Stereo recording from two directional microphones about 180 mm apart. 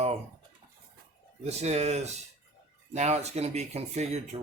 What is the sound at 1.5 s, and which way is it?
Speech, 35° right (ahead or behind).